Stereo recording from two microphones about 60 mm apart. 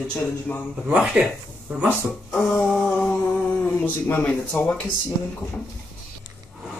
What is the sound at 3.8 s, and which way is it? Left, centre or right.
Speech, left.